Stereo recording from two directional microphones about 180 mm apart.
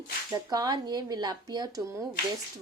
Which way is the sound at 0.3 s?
20° right (ahead or behind).